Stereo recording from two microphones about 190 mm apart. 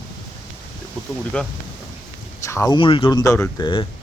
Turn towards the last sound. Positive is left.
turn(degrees=25)  # may be behind; listen again after turning